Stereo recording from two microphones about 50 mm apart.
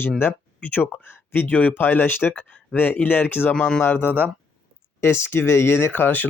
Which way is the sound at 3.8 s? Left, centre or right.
Left.